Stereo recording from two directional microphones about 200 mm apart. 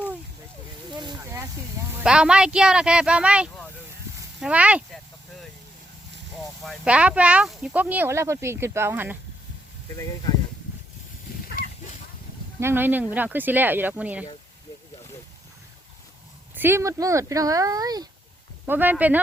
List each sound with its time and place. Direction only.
0.9 s a sound: 15° right (ahead or behind)
2.0 s speech: 5° right (ahead or behind)
6.4 s speech: 5° right (ahead or behind)
11.4 s a sound: 45° left (ahead or behind)
12.5 s speech: 10° right (ahead or behind)
16.6 s speech: 10° right (ahead or behind)